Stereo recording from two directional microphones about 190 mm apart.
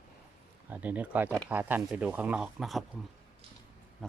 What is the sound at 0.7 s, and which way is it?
Speech, 10° right (ahead or behind).